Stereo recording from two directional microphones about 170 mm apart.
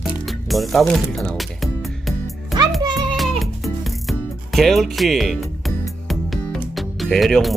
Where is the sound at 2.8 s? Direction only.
25° right (ahead or behind).